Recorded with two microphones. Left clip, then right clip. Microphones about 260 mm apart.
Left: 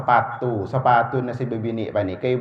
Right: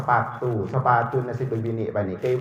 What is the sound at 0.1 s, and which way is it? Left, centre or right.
Speech, left.